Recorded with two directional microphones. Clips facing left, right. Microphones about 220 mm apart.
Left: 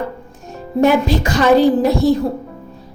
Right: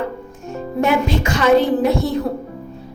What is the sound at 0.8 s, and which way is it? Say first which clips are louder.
A woman's voice: left 4 dB; 35° left (ahead or behind).